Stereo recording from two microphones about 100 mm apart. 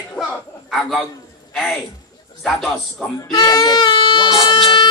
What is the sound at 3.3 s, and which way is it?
Speech, 45° left (ahead or behind).